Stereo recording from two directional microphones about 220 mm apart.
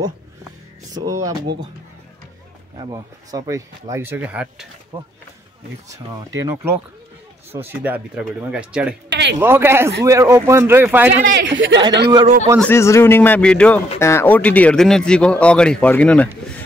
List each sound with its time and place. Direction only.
1.0 s speech: 15° right (ahead or behind)
2.8 s speech: 15° right (ahead or behind)
6.1 s speech: 15° right (ahead or behind)
9.1 s a man's voice: 50° right (ahead or behind)
9.4 s speech: 10° right (ahead or behind)
11.2 s speech: 50° right (ahead or behind)
12.5 s a man's voice: 10° left (ahead or behind)